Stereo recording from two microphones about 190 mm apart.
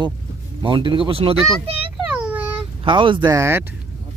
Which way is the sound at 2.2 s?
10° right (ahead or behind).